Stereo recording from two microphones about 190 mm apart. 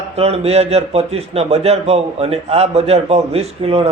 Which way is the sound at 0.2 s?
35° right (ahead or behind).